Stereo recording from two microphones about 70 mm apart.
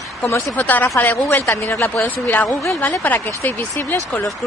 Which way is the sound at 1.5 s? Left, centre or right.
Left.